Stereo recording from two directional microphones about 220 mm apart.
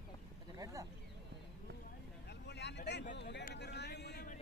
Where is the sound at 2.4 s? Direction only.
50° left (ahead or behind).